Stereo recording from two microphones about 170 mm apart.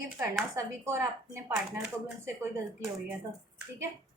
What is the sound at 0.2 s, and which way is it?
Speech, 15° right (ahead or behind).